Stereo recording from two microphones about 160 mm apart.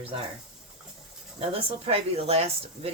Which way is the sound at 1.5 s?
35° right (ahead or behind).